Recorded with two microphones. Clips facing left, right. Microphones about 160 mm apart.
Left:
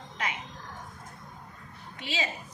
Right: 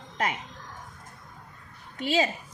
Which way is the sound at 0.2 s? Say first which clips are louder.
Right 5 dB; 45° right (ahead or behind).